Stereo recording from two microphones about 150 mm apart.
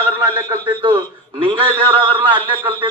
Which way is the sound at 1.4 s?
40° right (ahead or behind).